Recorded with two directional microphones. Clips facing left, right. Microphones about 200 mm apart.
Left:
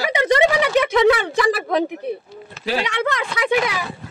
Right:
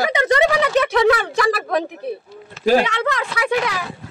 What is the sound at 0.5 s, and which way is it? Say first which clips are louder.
Speech: even; 15° left (ahead or behind).